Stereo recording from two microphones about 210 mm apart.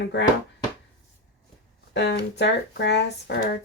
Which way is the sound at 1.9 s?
55° left (ahead or behind).